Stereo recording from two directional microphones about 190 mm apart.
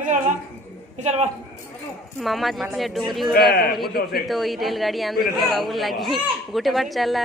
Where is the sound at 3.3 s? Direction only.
55° left (ahead or behind).